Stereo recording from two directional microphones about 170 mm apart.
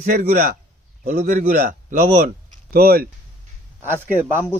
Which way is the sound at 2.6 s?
60° right (ahead or behind).